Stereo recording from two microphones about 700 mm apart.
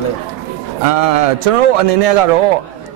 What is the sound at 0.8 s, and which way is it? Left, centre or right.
A man's voice, right.